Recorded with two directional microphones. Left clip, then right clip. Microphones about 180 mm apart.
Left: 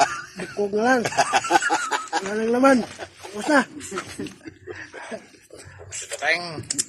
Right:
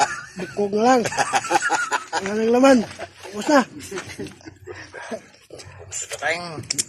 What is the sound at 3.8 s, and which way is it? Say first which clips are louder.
Speech: even; 15° right (ahead or behind).